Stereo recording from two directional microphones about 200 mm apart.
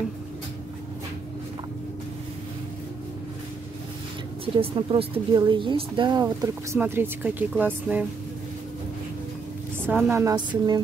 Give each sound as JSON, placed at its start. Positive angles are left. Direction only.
{"t": 4.6, "sound": "speech", "side_deg": -30}
{"t": 9.8, "sound": "speech", "side_deg": -10}